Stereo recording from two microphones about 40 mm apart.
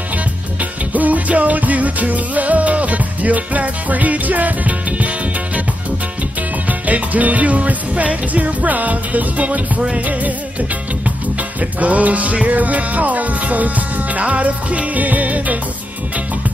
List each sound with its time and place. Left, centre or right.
0.9 s music: right
6.9 s music: right
11.8 s music: right